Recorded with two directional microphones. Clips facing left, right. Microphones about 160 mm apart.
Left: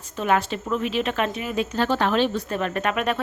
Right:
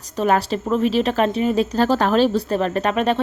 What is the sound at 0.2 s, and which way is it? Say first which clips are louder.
A woman's voice: right 4 dB; 35° right (ahead or behind).